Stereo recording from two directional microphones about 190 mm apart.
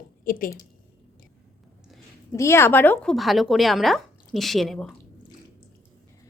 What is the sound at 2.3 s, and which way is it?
Speech, 15° left (ahead or behind).